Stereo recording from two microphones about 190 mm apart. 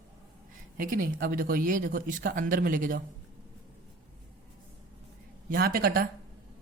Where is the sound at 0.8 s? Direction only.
45° right (ahead or behind).